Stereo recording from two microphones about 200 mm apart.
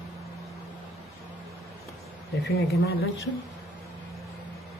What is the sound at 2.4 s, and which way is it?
Speech, 50° left (ahead or behind).